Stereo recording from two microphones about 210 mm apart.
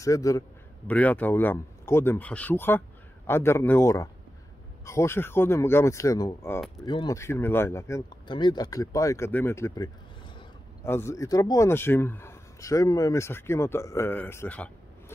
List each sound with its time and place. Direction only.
0.0 s a man's voice: 15° left (ahead or behind)
10.9 s a man's voice: 10° left (ahead or behind)